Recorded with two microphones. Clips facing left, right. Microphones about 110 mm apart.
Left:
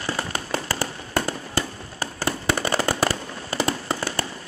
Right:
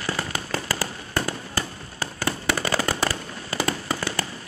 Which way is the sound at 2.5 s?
20° left (ahead or behind).